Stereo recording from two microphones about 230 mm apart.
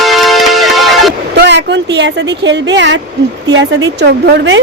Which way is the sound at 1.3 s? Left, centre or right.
Right.